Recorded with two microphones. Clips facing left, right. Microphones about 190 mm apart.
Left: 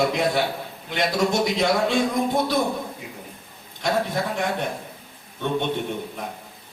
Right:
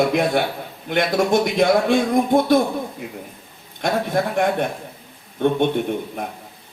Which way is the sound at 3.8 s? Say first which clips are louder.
Right 3 dB; 55° right (ahead or behind).